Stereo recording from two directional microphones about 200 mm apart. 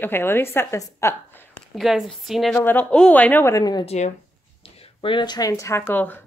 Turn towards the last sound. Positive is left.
turn(degrees=10)  # may be behind; listen again after turning